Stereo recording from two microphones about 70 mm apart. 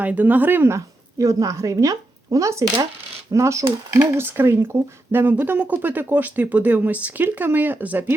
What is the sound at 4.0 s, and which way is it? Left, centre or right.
Speech, right.